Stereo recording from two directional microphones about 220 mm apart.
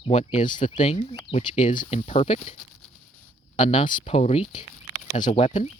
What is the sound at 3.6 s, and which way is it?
Speech, 35° left (ahead or behind).